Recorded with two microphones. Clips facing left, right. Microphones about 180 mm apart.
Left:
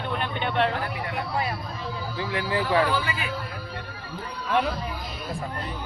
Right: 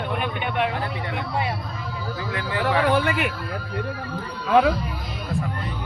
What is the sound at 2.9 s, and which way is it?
Speech, 70° right (ahead or behind).